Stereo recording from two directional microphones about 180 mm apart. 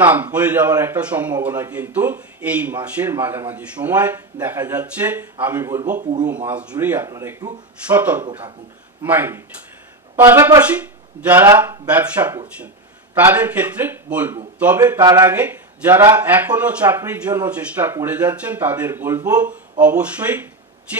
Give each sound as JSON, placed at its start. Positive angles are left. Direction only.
{"t": 0.0, "sound": "speech", "side_deg": -10}
{"t": 5.9, "sound": "speech", "side_deg": -45}
{"t": 6.2, "sound": "speech", "side_deg": -10}
{"t": 14.8, "sound": "speech", "side_deg": -20}
{"t": 15.2, "sound": "speech", "side_deg": -10}